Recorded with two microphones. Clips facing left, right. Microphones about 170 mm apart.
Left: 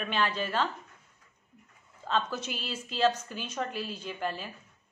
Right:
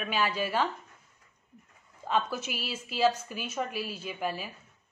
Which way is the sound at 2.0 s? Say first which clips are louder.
Right 1 dB; 10° right (ahead or behind).